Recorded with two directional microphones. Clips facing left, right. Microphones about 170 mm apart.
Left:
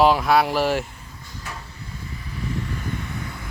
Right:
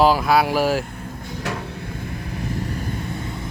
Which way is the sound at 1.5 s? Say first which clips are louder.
Right 9 dB; 80° right.